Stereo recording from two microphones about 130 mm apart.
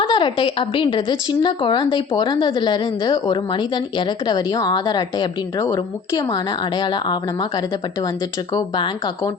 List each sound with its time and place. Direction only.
0.0 s speech: 40° left (ahead or behind)